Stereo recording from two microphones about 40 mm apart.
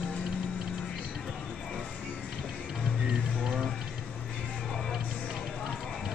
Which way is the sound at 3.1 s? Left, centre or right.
Right.